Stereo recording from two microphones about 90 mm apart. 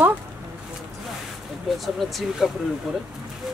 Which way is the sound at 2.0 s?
Centre (ahead or behind).